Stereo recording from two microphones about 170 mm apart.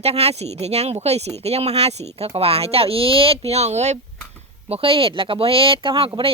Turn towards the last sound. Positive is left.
turn(degrees=-30)  # may be behind; listen again after turning